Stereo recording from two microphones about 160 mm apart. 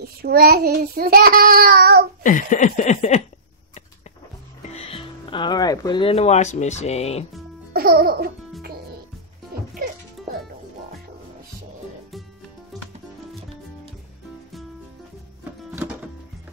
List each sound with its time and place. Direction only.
0.0 s child singing: 70° right (ahead or behind)
2.2 s a sound: 50° left (ahead or behind)
4.7 s speech: 35° left (ahead or behind)
7.7 s music: 70° right (ahead or behind)
9.5 s music: 70° right (ahead or behind)